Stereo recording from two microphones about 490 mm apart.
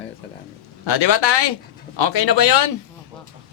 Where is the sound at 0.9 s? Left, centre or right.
Left.